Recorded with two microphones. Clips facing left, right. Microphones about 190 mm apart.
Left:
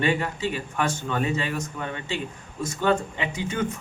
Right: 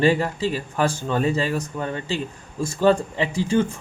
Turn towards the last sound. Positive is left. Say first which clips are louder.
# right 7 dB
turn(degrees=-30)  # may be behind; listen again after turning